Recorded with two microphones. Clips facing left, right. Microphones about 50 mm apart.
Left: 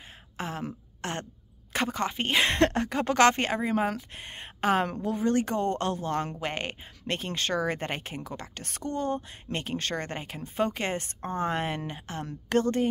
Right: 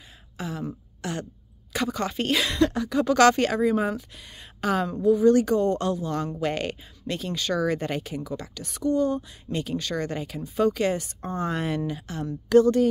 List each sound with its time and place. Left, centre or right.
0.4 s throat clearing: left
1.0 s a woman's voice: left
2.4 s speech: left
3.9 s speech: left
4.8 s speech: left
6.4 s a woman's voice: left
7.1 s speech: left